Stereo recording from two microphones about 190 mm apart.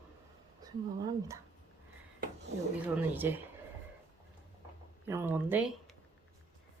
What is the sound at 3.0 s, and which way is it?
Speech, 10° right (ahead or behind).